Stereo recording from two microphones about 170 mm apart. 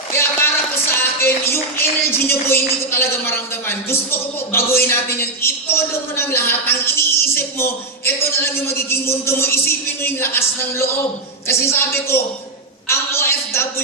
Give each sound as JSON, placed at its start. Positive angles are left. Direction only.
{"t": 0.1, "sound": "music", "side_deg": 15}
{"t": 4.9, "sound": "a woman's voice", "side_deg": 15}
{"t": 12.9, "sound": "a sound", "side_deg": 15}